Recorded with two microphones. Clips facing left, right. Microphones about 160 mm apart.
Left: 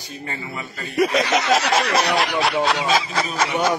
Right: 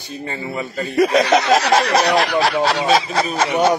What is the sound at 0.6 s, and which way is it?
Speech, 35° right (ahead or behind).